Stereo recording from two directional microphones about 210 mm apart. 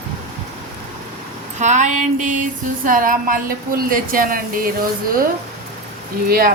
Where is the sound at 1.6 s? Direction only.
35° right (ahead or behind).